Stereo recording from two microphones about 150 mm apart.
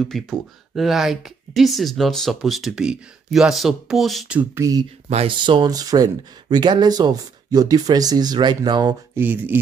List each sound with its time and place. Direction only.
0.0 s speech: 5° left (ahead or behind)
4.4 s speech: 20° right (ahead or behind)
5.1 s speech: 35° right (ahead or behind)
9.1 s speech: 10° right (ahead or behind)